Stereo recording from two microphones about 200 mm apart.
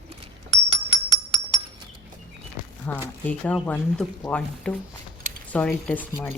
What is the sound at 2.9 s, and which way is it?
Speech, 10° left (ahead or behind).